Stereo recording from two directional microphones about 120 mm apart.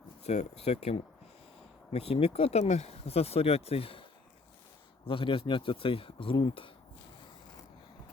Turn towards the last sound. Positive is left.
turn(degrees=45)  # may be behind; listen again after turning